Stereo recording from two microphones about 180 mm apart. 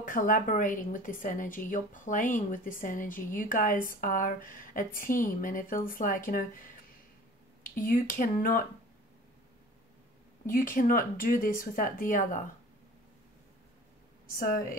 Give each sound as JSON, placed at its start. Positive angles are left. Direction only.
{"t": 0.0, "sound": "a woman's voice", "side_deg": 50}
{"t": 7.7, "sound": "a woman's voice", "side_deg": 50}
{"t": 10.4, "sound": "a woman's voice", "side_deg": 50}
{"t": 14.5, "sound": "a woman's voice", "side_deg": 50}